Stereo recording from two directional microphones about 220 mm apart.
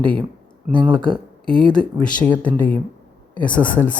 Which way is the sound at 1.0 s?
25° right (ahead or behind).